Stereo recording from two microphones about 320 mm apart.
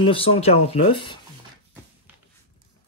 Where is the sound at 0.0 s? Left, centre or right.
Centre.